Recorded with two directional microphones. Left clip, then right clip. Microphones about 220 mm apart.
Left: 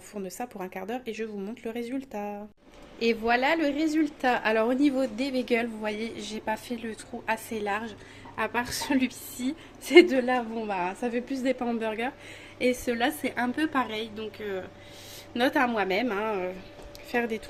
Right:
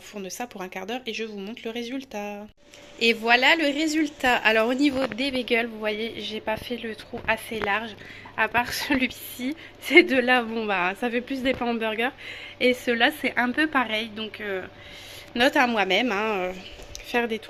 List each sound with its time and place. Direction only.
0.3 s a woman's voice: centre (ahead or behind)